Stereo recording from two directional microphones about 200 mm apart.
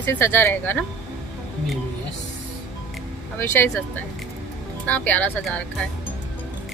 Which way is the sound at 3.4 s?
10° left (ahead or behind).